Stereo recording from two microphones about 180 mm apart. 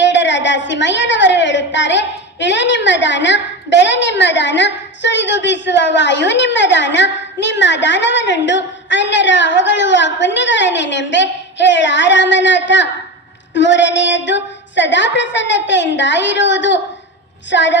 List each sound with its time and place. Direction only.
0.0 s a woman's voice: 85° left